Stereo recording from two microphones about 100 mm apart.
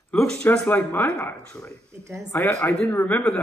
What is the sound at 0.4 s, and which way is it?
A man's voice, 15° left (ahead or behind).